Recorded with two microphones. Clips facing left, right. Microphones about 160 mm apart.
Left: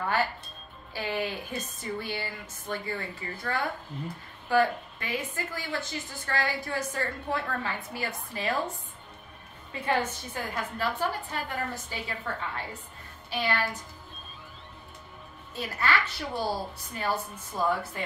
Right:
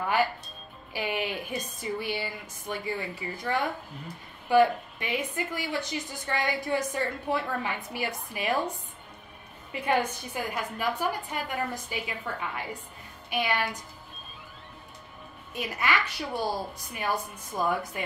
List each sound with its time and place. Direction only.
0.9 s a woman's voice: 15° right (ahead or behind)
9.7 s a woman's voice: 15° right (ahead or behind)
15.5 s a woman's voice: 15° right (ahead or behind)